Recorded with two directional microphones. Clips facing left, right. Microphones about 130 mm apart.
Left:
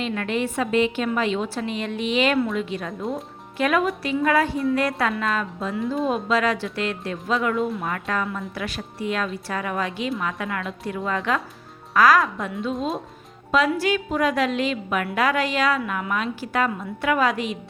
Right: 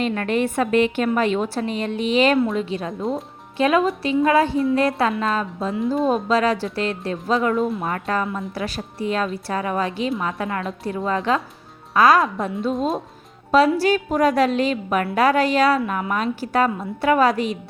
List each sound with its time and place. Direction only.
0.0 s a woman's voice: 45° right (ahead or behind)